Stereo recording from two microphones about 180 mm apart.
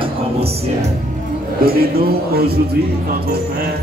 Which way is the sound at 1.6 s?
55° right (ahead or behind).